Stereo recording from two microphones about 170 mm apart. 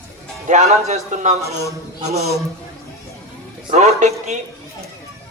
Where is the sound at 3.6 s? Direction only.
40° right (ahead or behind).